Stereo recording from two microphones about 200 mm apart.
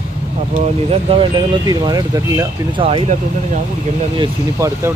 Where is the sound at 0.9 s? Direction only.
25° right (ahead or behind).